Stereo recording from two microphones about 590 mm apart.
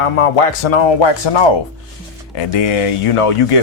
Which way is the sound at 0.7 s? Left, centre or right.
Left.